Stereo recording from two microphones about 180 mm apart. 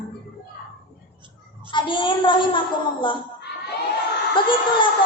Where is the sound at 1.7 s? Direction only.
25° left (ahead or behind).